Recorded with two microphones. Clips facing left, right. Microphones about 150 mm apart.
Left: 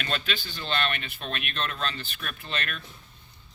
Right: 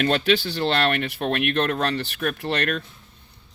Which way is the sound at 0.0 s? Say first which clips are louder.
Right 12 dB; 70° right (ahead or behind).